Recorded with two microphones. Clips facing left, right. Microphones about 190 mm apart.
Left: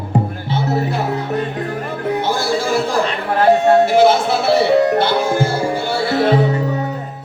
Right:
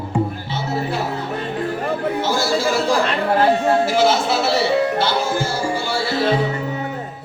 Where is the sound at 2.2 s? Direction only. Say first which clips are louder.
Left 1 dB; 55° left (ahead or behind).